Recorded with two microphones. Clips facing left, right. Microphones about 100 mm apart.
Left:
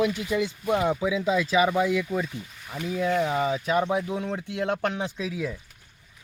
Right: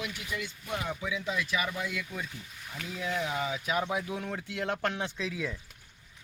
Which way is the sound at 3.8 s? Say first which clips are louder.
Left 6 dB; 20° left (ahead or behind).